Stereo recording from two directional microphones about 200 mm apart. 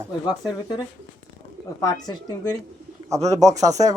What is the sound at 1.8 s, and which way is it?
Speech, 15° left (ahead or behind).